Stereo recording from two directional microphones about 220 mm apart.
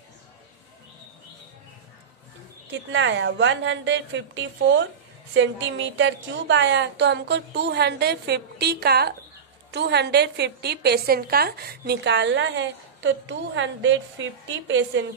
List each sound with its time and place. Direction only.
2.7 s a woman's voice: 55° right (ahead or behind)